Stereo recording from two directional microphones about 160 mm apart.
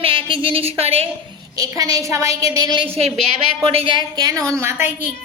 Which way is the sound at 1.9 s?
20° right (ahead or behind).